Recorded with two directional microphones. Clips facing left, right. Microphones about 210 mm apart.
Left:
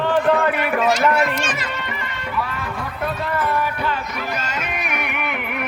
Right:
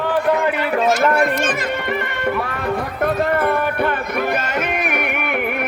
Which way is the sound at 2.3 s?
55° right (ahead or behind).